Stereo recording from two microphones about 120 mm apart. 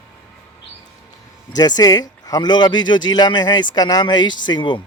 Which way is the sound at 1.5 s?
35° left (ahead or behind).